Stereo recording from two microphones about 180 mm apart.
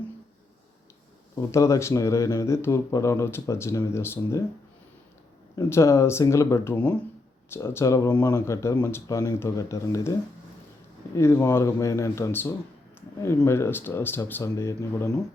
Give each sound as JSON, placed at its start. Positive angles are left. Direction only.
{"t": 1.4, "sound": "speech", "side_deg": 15}
{"t": 5.5, "sound": "speech", "side_deg": 15}